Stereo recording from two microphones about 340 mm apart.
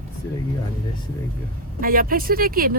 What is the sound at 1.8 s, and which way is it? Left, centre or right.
Speech, right.